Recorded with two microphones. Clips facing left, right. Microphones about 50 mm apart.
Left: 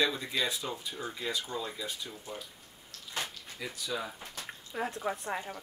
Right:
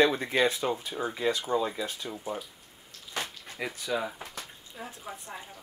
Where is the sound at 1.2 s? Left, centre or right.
Right.